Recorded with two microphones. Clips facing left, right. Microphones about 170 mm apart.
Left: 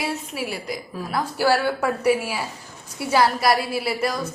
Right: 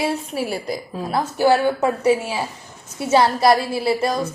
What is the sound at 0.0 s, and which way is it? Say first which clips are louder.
A woman's voice: right 5 dB; 30° right (ahead or behind).